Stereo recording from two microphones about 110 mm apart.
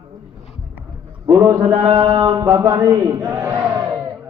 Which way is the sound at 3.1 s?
30° right (ahead or behind).